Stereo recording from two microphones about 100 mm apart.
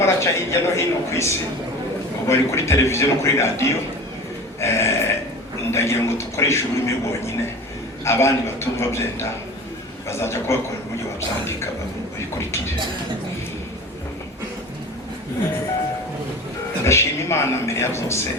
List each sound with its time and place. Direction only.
0.0 s speech: 25° left (ahead or behind)
4.6 s burping: 25° left (ahead or behind)
5.7 s a man's voice: 25° left (ahead or behind)
12.4 s speech: 25° left (ahead or behind)
16.8 s speech: 25° left (ahead or behind)